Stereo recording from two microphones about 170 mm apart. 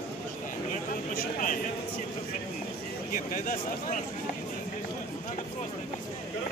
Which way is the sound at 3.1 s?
55° left (ahead or behind).